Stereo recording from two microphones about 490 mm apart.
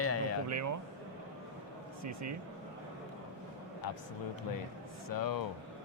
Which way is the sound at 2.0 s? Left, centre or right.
Right.